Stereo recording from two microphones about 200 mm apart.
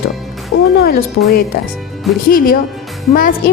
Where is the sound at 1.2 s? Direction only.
75° left (ahead or behind).